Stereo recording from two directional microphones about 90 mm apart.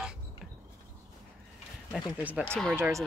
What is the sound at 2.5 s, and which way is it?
Speech, 5° left (ahead or behind).